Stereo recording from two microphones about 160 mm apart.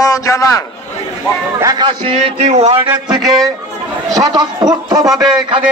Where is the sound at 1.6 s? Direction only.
25° right (ahead or behind); by 2.8 s 40° right (ahead or behind).